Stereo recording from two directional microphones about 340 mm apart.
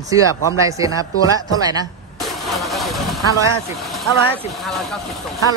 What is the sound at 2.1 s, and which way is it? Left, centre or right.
Speech, centre.